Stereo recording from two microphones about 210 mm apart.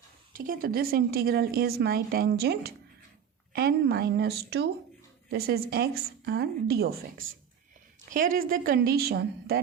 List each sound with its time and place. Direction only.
0.3 s a woman's voice: 40° right (ahead or behind)